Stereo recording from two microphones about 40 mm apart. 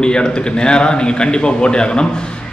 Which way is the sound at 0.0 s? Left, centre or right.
Left.